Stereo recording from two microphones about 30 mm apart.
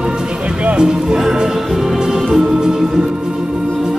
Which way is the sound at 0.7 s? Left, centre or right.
Right.